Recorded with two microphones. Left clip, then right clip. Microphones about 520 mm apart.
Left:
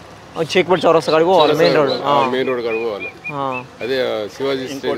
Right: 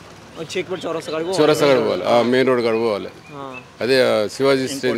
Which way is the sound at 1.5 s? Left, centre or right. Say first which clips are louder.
Left 2 dB; right.